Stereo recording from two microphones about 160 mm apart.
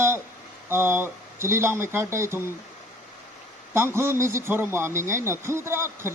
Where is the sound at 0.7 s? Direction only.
15° right (ahead or behind).